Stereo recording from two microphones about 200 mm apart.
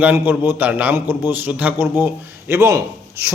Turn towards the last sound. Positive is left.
turn(degrees=-15)  # may be behind; listen again after turning